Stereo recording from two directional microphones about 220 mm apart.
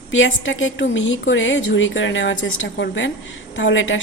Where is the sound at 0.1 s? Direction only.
60° left (ahead or behind).